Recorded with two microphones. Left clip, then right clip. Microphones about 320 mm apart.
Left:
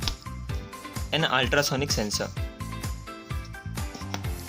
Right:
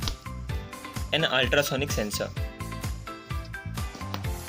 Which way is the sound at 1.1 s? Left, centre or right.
Centre.